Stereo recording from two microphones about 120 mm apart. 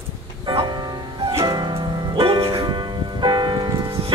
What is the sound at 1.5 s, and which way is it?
Music, 35° right (ahead or behind).